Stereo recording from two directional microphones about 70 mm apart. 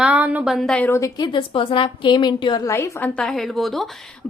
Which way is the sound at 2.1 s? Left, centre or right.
Left.